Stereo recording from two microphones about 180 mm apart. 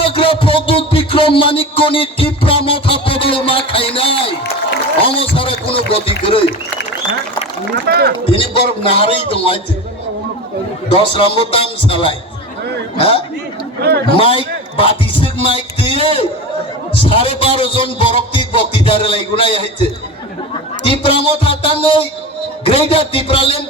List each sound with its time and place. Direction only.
0.0 s a sound: 30° left (ahead or behind)
5.3 s run: 30° left (ahead or behind)
7.9 s speech: 60° right (ahead or behind)
8.3 s a man's voice: 30° left (ahead or behind)
10.8 s a man's voice: 30° left (ahead or behind)
13.8 s speech: 65° right (ahead or behind)
14.2 s a man's voice: 30° left (ahead or behind)
20.8 s a man's voice: 30° left (ahead or behind)